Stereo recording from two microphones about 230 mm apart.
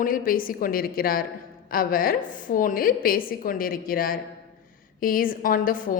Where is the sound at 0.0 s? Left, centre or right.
Left.